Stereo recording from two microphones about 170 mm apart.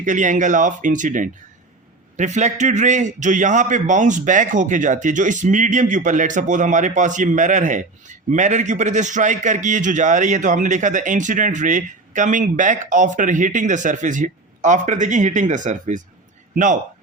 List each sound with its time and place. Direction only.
0.0 s a man's voice: 45° right (ahead or behind)